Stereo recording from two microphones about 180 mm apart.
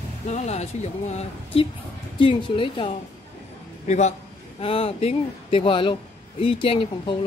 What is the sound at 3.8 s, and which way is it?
A man's voice, 40° left (ahead or behind).